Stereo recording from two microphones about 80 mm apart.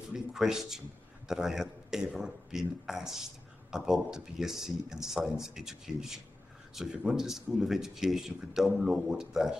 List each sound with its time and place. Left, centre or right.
0.1 s a man's voice: centre